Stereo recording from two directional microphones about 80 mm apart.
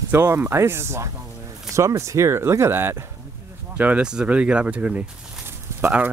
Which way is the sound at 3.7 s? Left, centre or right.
Centre.